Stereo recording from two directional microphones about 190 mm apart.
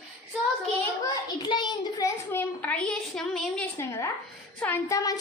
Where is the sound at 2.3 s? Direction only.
10° left (ahead or behind).